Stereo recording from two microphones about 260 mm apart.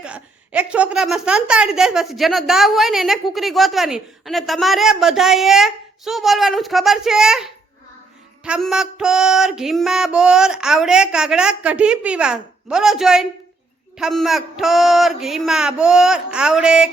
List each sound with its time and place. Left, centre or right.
0.0 s a woman's voice: centre